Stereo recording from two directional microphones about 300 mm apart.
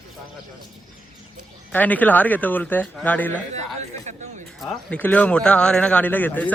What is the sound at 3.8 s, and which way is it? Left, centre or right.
Speech, right.